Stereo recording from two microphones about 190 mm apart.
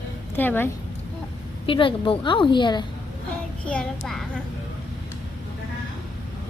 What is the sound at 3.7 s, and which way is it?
Speech, 5° left (ahead or behind).